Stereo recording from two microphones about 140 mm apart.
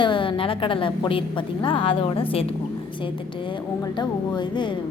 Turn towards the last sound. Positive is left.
turn(degrees=35)  # may be behind; listen again after turning